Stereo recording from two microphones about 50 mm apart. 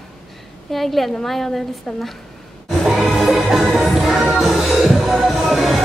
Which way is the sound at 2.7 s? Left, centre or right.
Centre.